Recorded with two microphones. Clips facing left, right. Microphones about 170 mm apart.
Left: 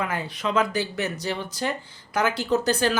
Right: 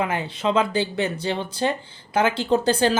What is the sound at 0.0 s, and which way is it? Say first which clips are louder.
Speech: right 4 dB; 25° right (ahead or behind).